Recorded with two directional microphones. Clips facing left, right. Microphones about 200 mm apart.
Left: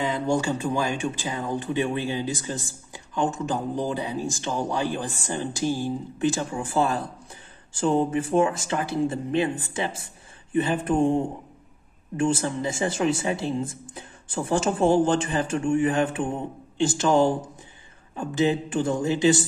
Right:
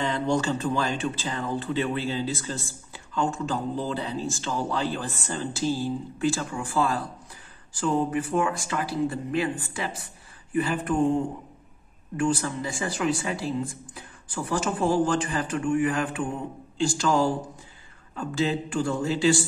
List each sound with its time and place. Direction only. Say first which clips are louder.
0.0 s speech: left 1 dB; 10° left (ahead or behind)